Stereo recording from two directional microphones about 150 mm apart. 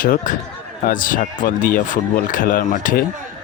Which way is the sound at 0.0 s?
65° left (ahead or behind).